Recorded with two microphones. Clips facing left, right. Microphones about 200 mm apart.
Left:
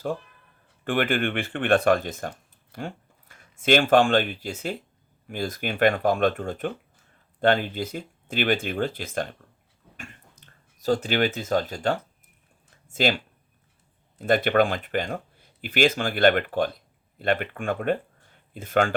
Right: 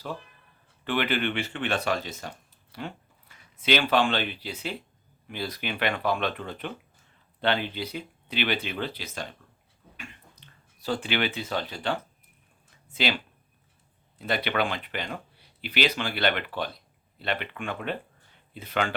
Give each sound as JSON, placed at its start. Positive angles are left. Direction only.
{"t": 0.9, "sound": "speech", "side_deg": 50}